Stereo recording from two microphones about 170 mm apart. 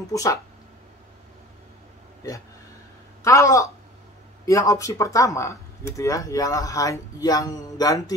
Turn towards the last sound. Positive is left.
turn(degrees=20)  # may be behind; listen again after turning